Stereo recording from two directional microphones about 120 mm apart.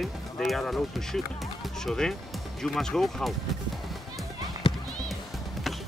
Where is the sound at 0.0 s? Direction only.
Centre (ahead or behind).